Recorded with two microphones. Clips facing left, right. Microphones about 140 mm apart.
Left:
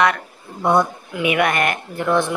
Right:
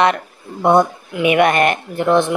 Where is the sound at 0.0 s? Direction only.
25° right (ahead or behind).